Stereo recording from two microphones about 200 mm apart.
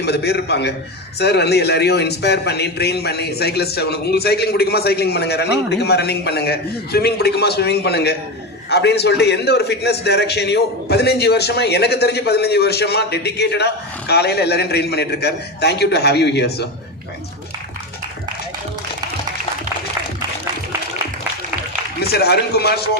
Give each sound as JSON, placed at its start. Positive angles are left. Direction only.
{"t": 0.0, "sound": "a man's voice", "side_deg": 55}
{"t": 22.1, "sound": "a man's voice", "side_deg": 55}